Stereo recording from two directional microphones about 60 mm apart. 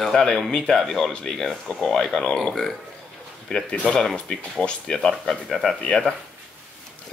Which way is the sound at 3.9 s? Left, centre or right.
Centre.